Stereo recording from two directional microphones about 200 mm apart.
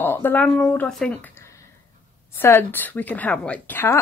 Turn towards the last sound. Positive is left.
turn(degrees=10)  # may be behind; listen again after turning